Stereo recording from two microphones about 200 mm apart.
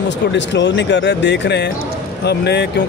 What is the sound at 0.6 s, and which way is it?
Speech, 65° left (ahead or behind).